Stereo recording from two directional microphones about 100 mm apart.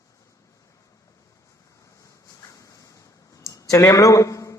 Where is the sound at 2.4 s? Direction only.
35° left (ahead or behind).